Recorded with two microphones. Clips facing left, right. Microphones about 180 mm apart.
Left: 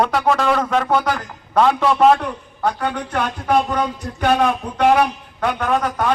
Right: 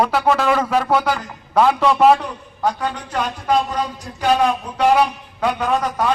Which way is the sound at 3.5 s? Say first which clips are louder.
Left 2 dB; 60° left (ahead or behind).